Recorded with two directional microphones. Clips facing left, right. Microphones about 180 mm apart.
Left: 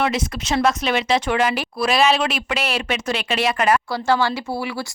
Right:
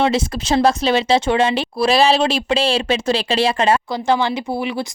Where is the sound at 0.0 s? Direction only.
30° right (ahead or behind).